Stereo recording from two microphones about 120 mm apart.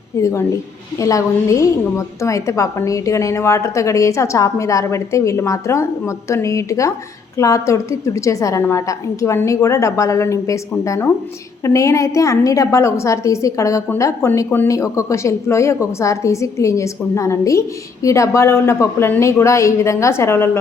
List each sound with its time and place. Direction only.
0.2 s a woman's voice: 25° left (ahead or behind)